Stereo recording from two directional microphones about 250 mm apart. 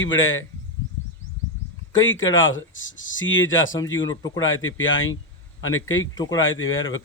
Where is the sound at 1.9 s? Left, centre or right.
Left.